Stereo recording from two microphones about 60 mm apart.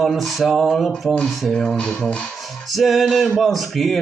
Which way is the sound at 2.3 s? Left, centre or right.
Centre.